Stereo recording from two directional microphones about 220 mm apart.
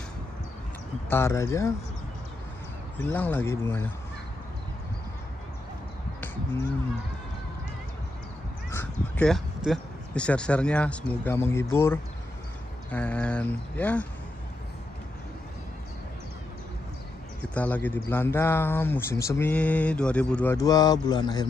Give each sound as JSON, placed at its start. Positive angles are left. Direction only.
{"t": 1.1, "sound": "speech", "side_deg": 10}
{"t": 3.0, "sound": "speech", "side_deg": 10}
{"t": 8.6, "sound": "crow", "side_deg": 10}
{"t": 9.7, "sound": "speech", "side_deg": 5}
{"t": 17.4, "sound": "speech", "side_deg": 5}
{"t": 20.5, "sound": "speech", "side_deg": 15}